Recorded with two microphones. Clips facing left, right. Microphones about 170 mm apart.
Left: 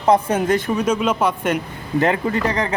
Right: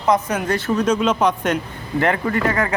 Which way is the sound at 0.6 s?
10° left (ahead or behind).